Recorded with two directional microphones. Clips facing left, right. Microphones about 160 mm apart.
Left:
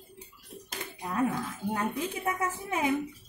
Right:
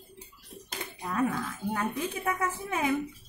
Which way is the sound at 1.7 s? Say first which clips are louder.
Even; 20° left (ahead or behind).